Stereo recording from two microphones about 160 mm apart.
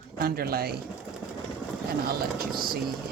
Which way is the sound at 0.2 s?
70° right (ahead or behind).